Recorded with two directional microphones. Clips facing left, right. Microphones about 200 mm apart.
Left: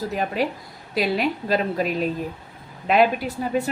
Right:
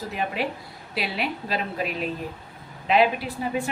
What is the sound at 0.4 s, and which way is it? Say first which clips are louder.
A woman's voice: left 4 dB; 40° left (ahead or behind).